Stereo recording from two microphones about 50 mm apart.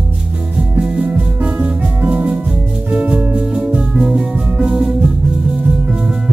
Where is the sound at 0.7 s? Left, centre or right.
Right.